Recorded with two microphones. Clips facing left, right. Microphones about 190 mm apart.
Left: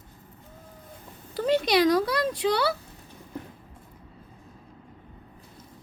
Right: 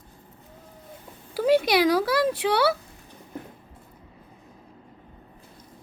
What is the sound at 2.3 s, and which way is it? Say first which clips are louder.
Speech: right 1 dB; 70° right (ahead or behind).